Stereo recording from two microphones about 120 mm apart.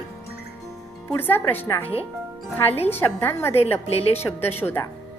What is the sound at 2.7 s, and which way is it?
Speech, 60° left (ahead or behind).